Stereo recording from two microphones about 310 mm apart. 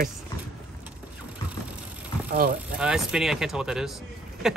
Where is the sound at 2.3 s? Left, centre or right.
Right.